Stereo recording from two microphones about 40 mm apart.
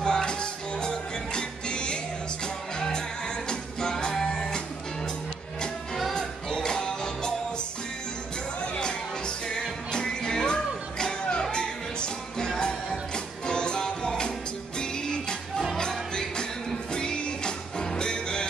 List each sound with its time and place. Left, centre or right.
0.0 s music: left
6.1 s music: centre
9.5 s music: centre